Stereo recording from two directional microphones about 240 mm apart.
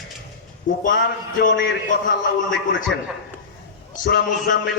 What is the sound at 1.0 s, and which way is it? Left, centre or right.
Speech, left.